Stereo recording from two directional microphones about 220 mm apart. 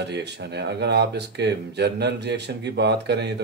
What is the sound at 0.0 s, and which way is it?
Speech, 50° right (ahead or behind).